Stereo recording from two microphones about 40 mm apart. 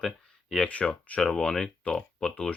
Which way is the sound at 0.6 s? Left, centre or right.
Left.